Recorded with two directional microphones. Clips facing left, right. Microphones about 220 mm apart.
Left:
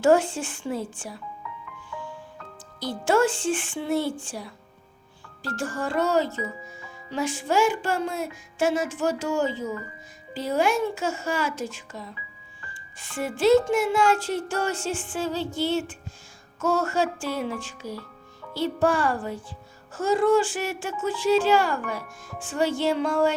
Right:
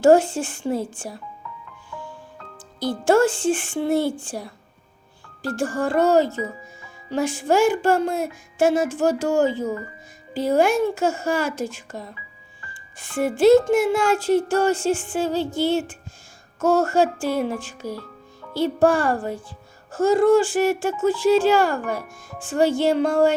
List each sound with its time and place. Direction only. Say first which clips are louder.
0.0 s speech: right 5 dB; 40° right (ahead or behind)
2.8 s speech: right 4 dB; 50° right (ahead or behind)